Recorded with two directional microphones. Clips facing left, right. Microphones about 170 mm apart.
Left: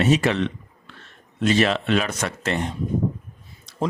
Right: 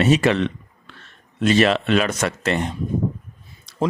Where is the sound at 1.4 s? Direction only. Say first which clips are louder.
Right 3 dB; 75° right (ahead or behind).